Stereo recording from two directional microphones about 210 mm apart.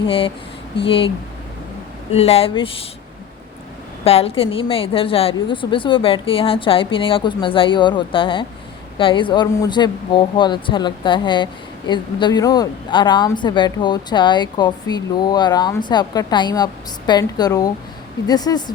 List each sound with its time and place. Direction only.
0.0 s speech: 25° left (ahead or behind)
2.1 s speech: 30° left (ahead or behind)
4.0 s speech: 30° left (ahead or behind)